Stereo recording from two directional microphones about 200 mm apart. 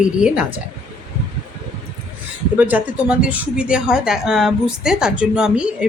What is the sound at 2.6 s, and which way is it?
Speech, 10° right (ahead or behind).